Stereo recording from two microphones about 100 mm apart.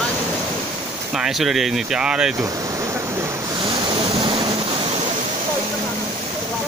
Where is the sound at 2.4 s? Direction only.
35° right (ahead or behind).